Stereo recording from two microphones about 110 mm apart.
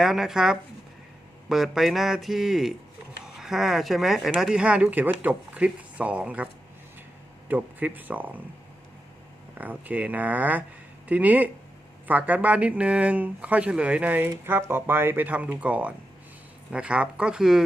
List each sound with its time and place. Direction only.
0.0 s speech: 5° right (ahead or behind)
9.6 s speech: 15° right (ahead or behind)